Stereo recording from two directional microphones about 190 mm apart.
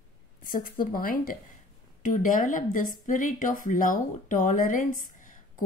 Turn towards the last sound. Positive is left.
turn(degrees=45)  # may be behind; listen again after turning